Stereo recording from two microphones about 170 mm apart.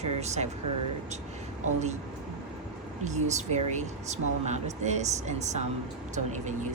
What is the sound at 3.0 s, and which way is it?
Speech, 45° right (ahead or behind).